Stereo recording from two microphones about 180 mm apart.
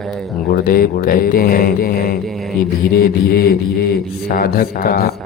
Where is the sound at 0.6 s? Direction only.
55° left (ahead or behind).